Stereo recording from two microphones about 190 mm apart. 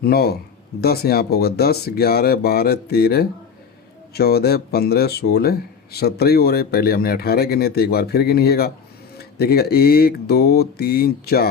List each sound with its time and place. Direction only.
0.0 s speech: 55° left (ahead or behind)